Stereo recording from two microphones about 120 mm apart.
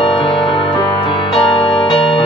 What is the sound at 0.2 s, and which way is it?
Music, 45° left (ahead or behind).